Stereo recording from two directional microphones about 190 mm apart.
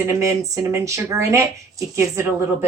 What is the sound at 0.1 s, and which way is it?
Speech, 15° right (ahead or behind).